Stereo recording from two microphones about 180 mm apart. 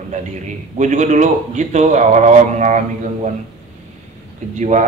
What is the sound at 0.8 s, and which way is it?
Speech, 40° right (ahead or behind).